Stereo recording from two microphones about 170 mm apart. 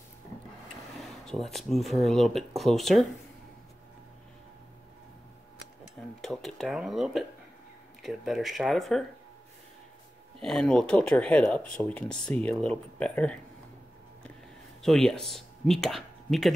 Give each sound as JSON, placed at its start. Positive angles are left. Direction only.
{"t": 1.0, "sound": "speech", "side_deg": 0}
{"t": 6.2, "sound": "speech", "side_deg": 0}
{"t": 10.4, "sound": "speech", "side_deg": 5}
{"t": 14.8, "sound": "speech", "side_deg": 0}